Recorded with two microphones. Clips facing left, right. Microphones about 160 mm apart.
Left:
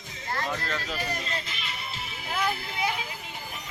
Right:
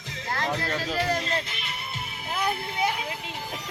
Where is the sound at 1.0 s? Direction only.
70° right (ahead or behind).